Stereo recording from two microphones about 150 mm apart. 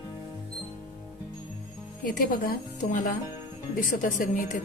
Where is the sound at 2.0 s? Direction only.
70° left (ahead or behind).